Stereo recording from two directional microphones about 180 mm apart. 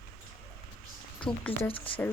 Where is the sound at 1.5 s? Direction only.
30° left (ahead or behind).